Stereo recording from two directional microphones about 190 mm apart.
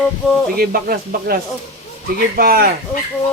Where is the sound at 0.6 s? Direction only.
50° right (ahead or behind).